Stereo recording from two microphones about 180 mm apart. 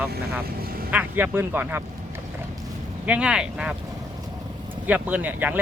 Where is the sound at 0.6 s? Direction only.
55° right (ahead or behind).